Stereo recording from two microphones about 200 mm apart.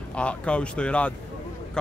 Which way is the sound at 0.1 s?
5° left (ahead or behind).